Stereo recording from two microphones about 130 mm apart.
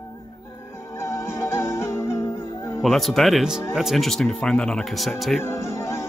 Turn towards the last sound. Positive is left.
turn(degrees=20)  # may be behind; listen again after turning